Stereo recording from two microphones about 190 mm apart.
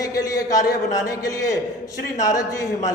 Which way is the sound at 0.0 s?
20° left (ahead or behind).